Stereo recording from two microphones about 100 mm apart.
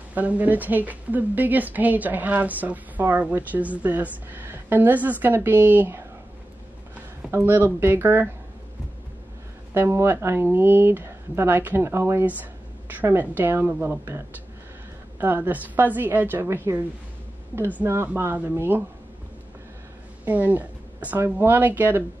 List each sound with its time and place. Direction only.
0.1 s a woman's voice: 15° right (ahead or behind)
7.2 s speech: 25° right (ahead or behind)
9.8 s speech: 25° right (ahead or behind)
17.8 s speech: 25° right (ahead or behind)
20.2 s a woman's voice: 15° right (ahead or behind)